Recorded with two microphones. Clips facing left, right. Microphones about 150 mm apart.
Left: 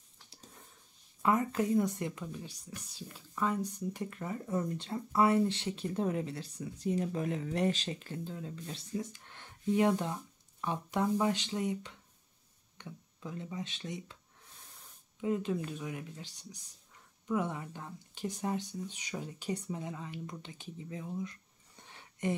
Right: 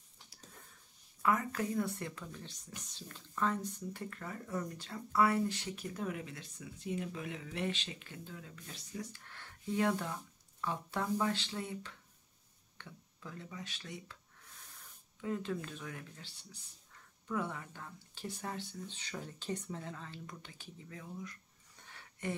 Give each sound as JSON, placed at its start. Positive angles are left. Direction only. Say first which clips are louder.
{"t": 1.2, "sound": "speech", "louder": "left 4 dB", "side_deg": 25}
{"t": 15.1, "sound": "speech", "louder": "left 5 dB", "side_deg": 20}
{"t": 21.8, "sound": "a sound", "louder": "left 6 dB", "side_deg": 20}